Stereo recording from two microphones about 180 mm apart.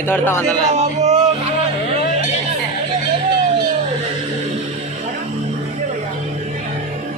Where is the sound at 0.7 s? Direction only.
40° right (ahead or behind).